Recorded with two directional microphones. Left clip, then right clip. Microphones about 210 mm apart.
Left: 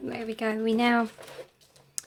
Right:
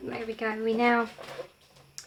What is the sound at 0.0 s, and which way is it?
Speech, 50° left (ahead or behind).